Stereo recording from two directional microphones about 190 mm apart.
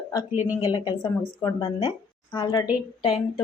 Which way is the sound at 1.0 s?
15° left (ahead or behind).